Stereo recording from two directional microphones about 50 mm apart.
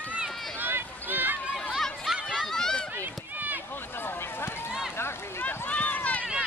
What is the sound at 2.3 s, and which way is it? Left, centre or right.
Run, centre.